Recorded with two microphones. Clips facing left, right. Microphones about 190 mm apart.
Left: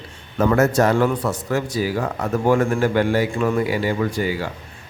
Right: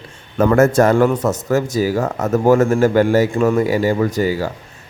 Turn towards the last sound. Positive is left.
turn(degrees=-40)  # may be behind; listen again after turning